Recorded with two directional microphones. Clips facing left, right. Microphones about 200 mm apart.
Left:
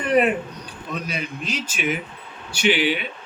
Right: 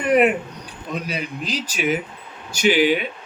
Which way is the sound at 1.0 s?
35° right (ahead or behind).